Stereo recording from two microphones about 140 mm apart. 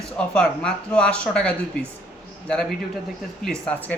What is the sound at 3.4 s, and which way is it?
Speech, 5° left (ahead or behind).